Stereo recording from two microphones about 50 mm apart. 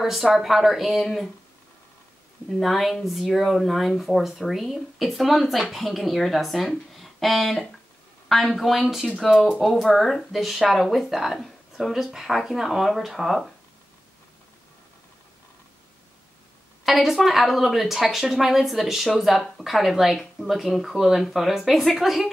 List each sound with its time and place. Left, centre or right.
0.0 s speech: centre
2.6 s speech: centre
16.8 s speech: centre